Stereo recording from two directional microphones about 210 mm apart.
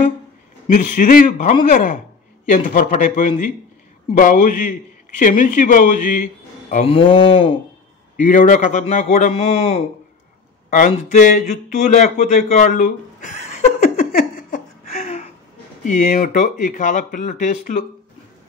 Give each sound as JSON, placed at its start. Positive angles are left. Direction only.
{"t": 0.7, "sound": "speech", "side_deg": 40}
{"t": 8.2, "sound": "speech", "side_deg": 40}
{"t": 9.3, "sound": "speech", "side_deg": 25}
{"t": 10.7, "sound": "speech", "side_deg": 40}
{"t": 11.9, "sound": "chuckle", "side_deg": 35}
{"t": 15.8, "sound": "speech", "side_deg": 40}